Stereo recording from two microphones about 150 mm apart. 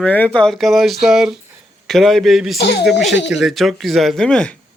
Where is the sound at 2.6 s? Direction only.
90° left.